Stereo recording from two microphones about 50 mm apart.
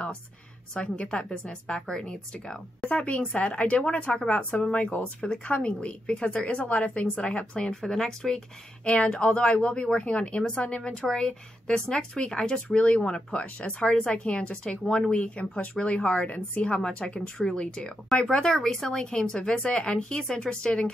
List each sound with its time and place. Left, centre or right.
0.7 s a woman's voice: centre
8.8 s a woman's voice: left